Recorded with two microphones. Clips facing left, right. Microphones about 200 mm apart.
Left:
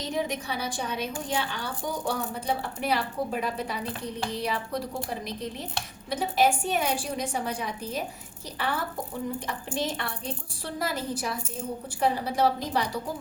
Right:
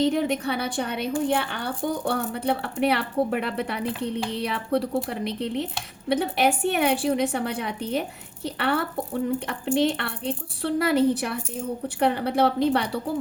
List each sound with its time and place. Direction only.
0.0 s speech: 60° right (ahead or behind)